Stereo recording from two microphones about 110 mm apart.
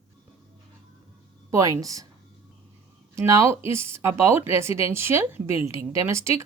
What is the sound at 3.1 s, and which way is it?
Speech, 25° right (ahead or behind).